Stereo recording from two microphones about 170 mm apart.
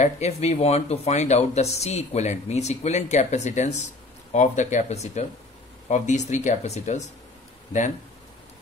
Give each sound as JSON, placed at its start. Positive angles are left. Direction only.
{"t": 0.0, "sound": "speech", "side_deg": 40}